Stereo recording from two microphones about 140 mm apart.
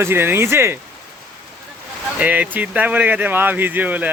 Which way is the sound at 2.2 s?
10° right (ahead or behind).